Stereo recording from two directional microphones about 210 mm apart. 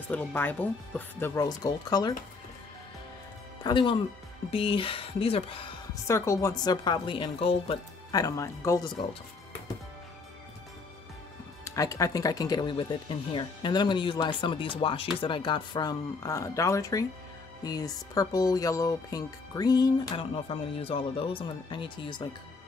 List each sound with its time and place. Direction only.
0.1 s speech: 5° left (ahead or behind)
3.6 s speech: 25° left (ahead or behind)
6.0 s speech: 15° left (ahead or behind)
11.6 s speech: 15° left (ahead or behind)